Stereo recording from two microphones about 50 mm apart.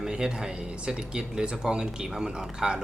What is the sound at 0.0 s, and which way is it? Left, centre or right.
Speech, centre.